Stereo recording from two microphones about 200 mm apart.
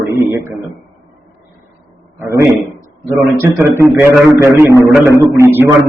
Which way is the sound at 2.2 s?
15° right (ahead or behind).